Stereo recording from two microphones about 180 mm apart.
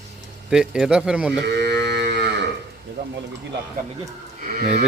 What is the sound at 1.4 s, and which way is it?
Cattle, 70° right (ahead or behind).